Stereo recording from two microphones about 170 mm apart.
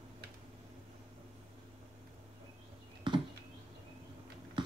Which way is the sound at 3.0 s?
30° right (ahead or behind).